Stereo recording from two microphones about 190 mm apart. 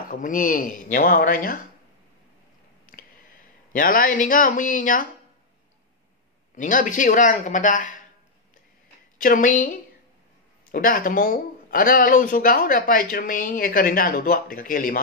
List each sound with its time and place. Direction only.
0.1 s speech: 45° left (ahead or behind)
3.7 s speech: 45° left (ahead or behind)
6.5 s speech: 45° left (ahead or behind)
9.2 s speech: 45° left (ahead or behind)
10.7 s speech: 50° left (ahead or behind)